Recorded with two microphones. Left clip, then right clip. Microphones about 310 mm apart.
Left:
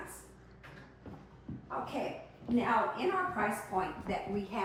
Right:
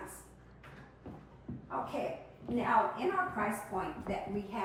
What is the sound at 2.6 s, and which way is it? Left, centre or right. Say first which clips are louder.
A woman's voice: right 1 dB; centre.